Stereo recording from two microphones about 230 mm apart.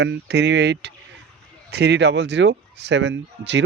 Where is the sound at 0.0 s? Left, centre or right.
Right.